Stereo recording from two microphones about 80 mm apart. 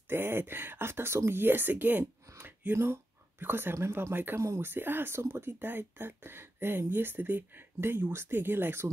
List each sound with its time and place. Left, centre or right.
0.1 s speech: right
2.2 s a sound: right
2.7 s speech: right